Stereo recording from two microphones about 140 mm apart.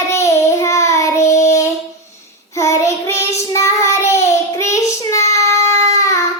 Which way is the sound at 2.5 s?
20° left (ahead or behind).